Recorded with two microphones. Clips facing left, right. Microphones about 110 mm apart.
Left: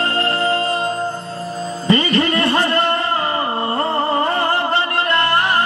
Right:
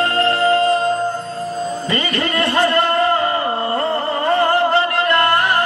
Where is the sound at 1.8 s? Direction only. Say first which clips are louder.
Left 10 dB; 30° left (ahead or behind).